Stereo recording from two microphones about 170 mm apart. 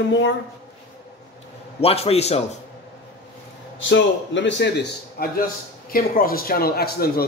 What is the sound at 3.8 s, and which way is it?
A man's voice, 90° left.